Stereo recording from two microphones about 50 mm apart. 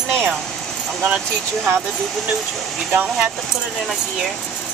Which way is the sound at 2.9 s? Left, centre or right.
Right.